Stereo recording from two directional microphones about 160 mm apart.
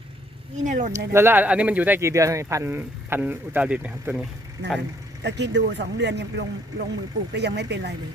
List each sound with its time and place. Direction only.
0.6 s speech: 50° right (ahead or behind)
0.9 s speech: 15° right (ahead or behind)
5.2 s speech: 90° right